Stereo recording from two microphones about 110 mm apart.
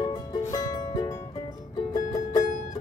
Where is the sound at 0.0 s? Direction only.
35° left (ahead or behind).